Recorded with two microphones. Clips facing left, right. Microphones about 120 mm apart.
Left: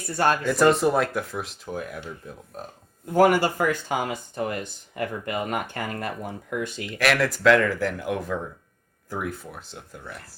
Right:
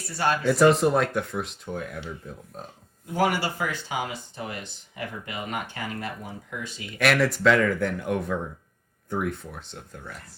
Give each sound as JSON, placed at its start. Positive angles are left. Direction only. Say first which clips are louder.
{"t": 0.0, "sound": "speech", "louder": "left 3 dB", "side_deg": 50}
{"t": 0.4, "sound": "speech", "louder": "right 3 dB", "side_deg": 0}
{"t": 3.1, "sound": "speech", "louder": "left 6 dB", "side_deg": 50}
{"t": 7.0, "sound": "speech", "louder": "even", "side_deg": 0}